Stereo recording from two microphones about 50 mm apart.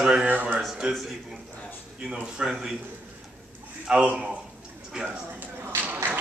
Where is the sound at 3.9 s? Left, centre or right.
Right.